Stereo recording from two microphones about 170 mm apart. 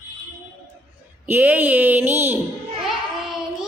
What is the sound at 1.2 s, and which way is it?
Speech, 10° right (ahead or behind).